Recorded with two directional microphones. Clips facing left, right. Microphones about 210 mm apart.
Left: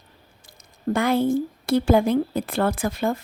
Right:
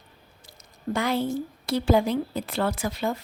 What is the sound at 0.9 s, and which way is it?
Speech, 55° left (ahead or behind).